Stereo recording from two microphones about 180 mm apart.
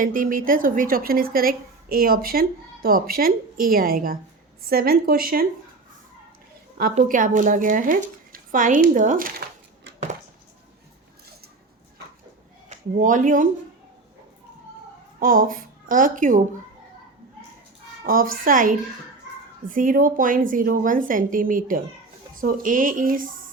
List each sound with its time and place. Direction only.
0.0 s speech: 50° right (ahead or behind)
6.9 s a woman's voice: 45° right (ahead or behind)
12.6 s speech: 45° right (ahead or behind)
15.2 s a woman's voice: 50° right (ahead or behind)
18.0 s speech: 50° right (ahead or behind)